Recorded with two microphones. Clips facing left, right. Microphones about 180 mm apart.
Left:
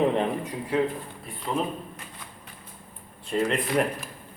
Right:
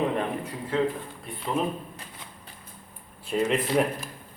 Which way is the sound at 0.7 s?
15° left (ahead or behind).